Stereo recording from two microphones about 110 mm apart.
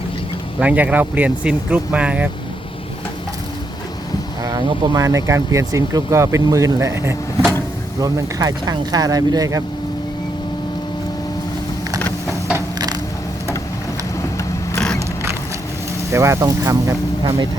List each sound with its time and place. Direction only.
0.6 s speech: 10° right (ahead or behind)
4.4 s speech: 35° right (ahead or behind)
11.9 s a sound: 20° left (ahead or behind)
16.1 s speech: 25° right (ahead or behind)